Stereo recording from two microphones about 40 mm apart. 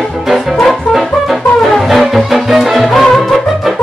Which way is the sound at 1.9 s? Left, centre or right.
Centre.